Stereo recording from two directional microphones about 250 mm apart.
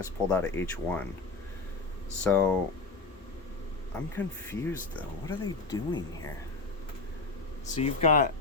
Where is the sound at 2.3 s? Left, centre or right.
Centre.